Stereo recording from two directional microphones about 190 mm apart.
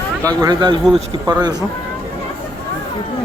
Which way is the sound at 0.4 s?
25° right (ahead or behind).